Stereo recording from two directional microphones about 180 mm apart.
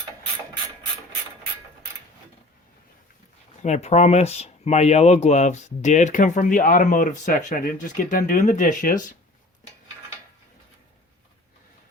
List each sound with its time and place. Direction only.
3.6 s speech: 40° left (ahead or behind)